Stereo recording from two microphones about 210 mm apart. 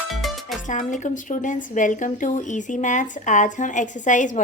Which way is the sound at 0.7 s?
35° left (ahead or behind).